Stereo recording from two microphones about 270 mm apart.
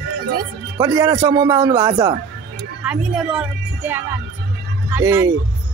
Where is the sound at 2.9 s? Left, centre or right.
Centre.